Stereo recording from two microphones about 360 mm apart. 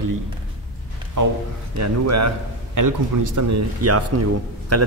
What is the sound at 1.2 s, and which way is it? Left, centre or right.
A man's voice, right.